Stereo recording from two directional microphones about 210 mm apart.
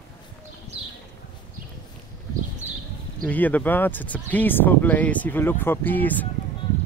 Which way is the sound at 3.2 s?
5° left (ahead or behind).